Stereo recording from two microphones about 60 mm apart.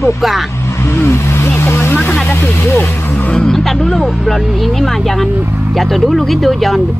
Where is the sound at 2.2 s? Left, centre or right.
Left.